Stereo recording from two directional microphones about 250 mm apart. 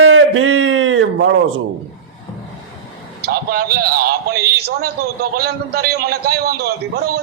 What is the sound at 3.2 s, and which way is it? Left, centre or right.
A man's voice, right.